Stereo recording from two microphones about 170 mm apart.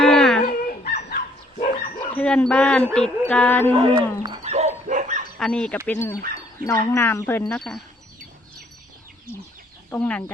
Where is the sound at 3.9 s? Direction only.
25° right (ahead or behind).